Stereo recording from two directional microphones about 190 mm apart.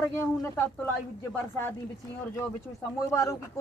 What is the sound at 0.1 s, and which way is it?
Speech, 15° left (ahead or behind).